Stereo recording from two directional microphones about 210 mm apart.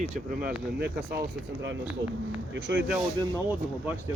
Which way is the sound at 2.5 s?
55° right (ahead or behind).